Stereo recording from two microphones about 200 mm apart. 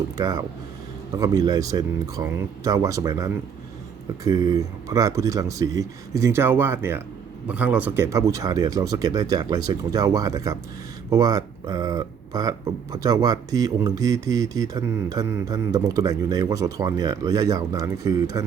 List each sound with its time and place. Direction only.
0.2 s speech: 20° right (ahead or behind)